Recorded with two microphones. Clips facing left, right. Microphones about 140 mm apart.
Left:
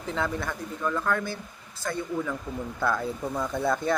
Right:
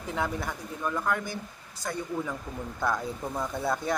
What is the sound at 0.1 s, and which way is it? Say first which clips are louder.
Speech: left 2 dB; 10° right (ahead or behind).